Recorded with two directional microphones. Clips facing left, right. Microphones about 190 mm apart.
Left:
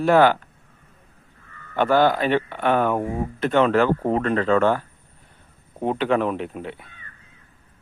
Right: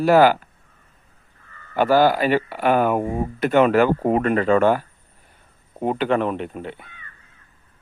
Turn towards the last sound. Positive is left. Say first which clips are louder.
# even
turn(degrees=0)  # may be behind; listen again after turning